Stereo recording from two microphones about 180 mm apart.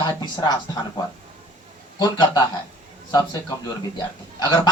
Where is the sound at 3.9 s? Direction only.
25° left (ahead or behind).